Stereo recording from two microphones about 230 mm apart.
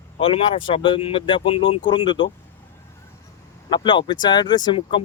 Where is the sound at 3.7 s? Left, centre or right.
Left.